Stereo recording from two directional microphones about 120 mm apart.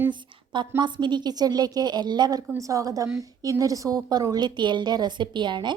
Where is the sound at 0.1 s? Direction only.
40° right (ahead or behind).